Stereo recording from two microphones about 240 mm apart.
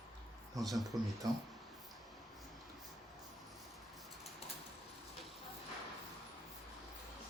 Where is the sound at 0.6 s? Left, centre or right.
Centre.